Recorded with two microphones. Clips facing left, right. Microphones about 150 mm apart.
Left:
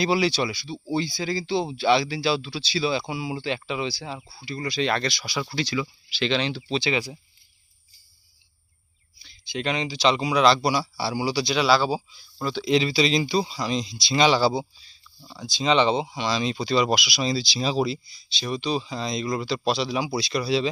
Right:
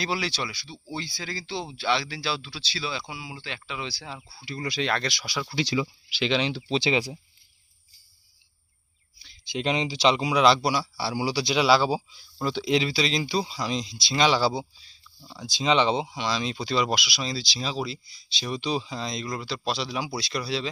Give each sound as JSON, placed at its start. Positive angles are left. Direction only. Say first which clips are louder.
{"t": 0.0, "sound": "speech", "louder": "left 7 dB", "side_deg": 10}
{"t": 3.8, "sound": "speech", "louder": "left 6 dB", "side_deg": 5}
{"t": 4.4, "sound": "a man's voice", "louder": "left 3 dB", "side_deg": -5}
{"t": 5.6, "sound": "speech", "louder": "right 1 dB", "side_deg": -25}
{"t": 6.1, "sound": "a man's voice", "louder": "left 1 dB", "side_deg": -5}
{"t": 6.7, "sound": "speech", "louder": "right 2 dB", "side_deg": -25}
{"t": 9.4, "sound": "speech", "louder": "right 1 dB", "side_deg": -20}
{"t": 10.1, "sound": "a man's voice", "louder": "left 1 dB", "side_deg": -10}
{"t": 12.6, "sound": "speech", "louder": "left 4 dB", "side_deg": -5}
{"t": 18.3, "sound": "speech", "louder": "left 2 dB", "side_deg": -5}